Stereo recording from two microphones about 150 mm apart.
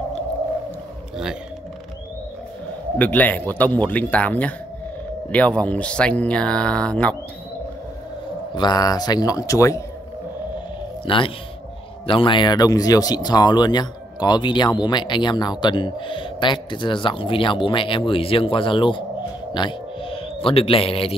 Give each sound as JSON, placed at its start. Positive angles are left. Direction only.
{"t": 3.0, "sound": "speech", "side_deg": 10}
{"t": 8.5, "sound": "speech", "side_deg": 25}
{"t": 11.1, "sound": "speech", "side_deg": 35}
{"t": 19.5, "sound": "music", "side_deg": 35}